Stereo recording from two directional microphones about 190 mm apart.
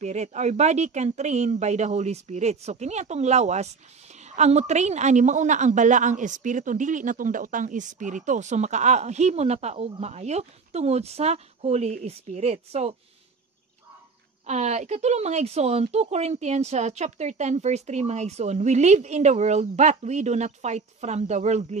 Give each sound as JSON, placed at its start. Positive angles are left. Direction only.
{"t": 0.0, "sound": "a woman's voice", "side_deg": -35}
{"t": 14.4, "sound": "a woman's voice", "side_deg": -35}